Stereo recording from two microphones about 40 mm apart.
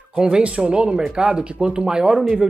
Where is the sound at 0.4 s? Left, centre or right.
Right.